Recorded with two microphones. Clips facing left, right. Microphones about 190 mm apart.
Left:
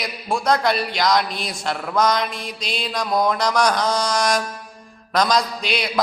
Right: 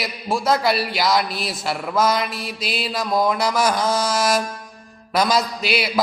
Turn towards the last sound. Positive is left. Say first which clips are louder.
# right 2 dB
turn(degrees=-5)  # may be behind; listen again after turning